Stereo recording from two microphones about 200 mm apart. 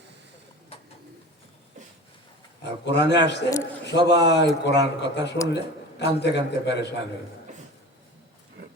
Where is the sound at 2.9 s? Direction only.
60° left (ahead or behind).